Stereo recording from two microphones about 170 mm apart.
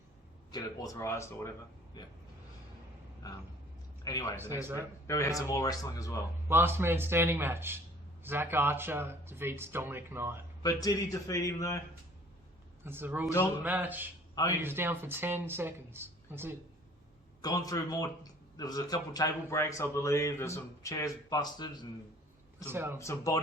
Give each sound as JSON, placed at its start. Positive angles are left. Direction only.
{"t": 0.5, "sound": "speech", "side_deg": 20}
{"t": 4.0, "sound": "speech", "side_deg": 20}
{"t": 6.5, "sound": "speech", "side_deg": -15}
{"t": 10.6, "sound": "speech", "side_deg": 20}
{"t": 12.8, "sound": "speech", "side_deg": -10}
{"t": 17.4, "sound": "speech", "side_deg": 20}
{"t": 22.6, "sound": "speech", "side_deg": -15}
{"t": 23.0, "sound": "speech", "side_deg": 20}